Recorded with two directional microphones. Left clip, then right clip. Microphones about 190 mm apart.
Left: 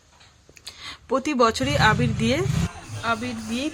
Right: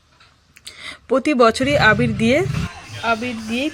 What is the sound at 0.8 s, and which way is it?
Speech, 15° right (ahead or behind).